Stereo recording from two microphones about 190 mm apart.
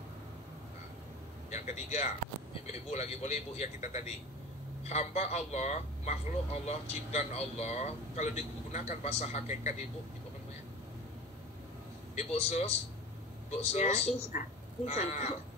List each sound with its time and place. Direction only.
1.5 s speech: 35° left (ahead or behind)
12.2 s speech: 35° left (ahead or behind)